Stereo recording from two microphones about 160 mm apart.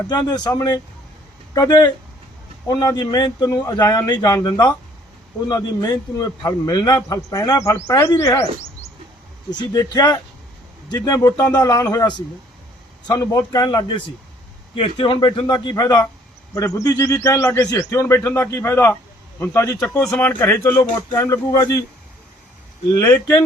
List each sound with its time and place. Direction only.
0.1 s a man's voice: 20° left (ahead or behind)
9.5 s a man's voice: 25° left (ahead or behind)
19.9 s speech: 10° left (ahead or behind)
23.0 s speech: 15° left (ahead or behind)